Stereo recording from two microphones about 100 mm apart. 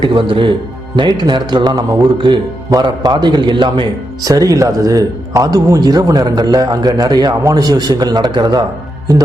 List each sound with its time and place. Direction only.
0.0 s a man's voice: 55° right (ahead or behind)